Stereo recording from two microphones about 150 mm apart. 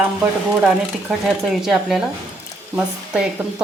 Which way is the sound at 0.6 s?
Centre (ahead or behind).